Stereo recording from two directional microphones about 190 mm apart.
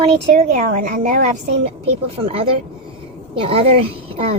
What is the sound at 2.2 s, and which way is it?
Speech, 30° right (ahead or behind).